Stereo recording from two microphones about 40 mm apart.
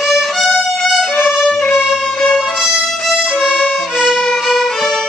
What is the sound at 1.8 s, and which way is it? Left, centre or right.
Music, centre.